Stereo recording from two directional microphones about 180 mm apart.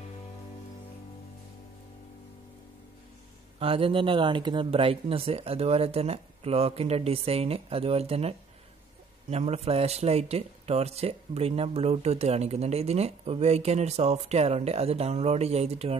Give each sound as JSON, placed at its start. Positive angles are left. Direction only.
{"t": 3.5, "sound": "speech", "side_deg": -30}